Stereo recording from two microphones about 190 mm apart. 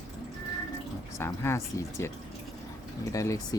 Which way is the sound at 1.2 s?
15° left (ahead or behind).